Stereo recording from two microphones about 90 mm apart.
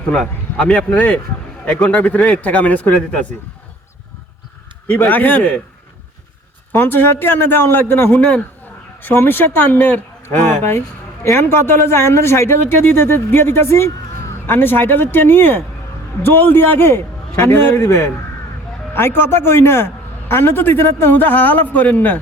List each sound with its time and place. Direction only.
0.1 s a man's voice: 10° left (ahead or behind)
4.9 s speech: 20° left (ahead or behind)
6.7 s speech: 25° left (ahead or behind)